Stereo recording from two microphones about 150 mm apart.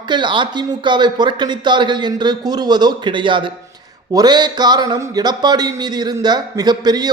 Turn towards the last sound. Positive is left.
turn(degrees=-25)  # may be behind; listen again after turning